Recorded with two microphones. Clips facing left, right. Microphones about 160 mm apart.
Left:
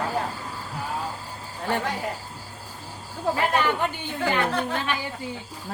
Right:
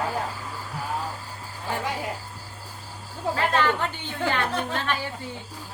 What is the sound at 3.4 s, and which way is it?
A woman's voice, 15° left (ahead or behind).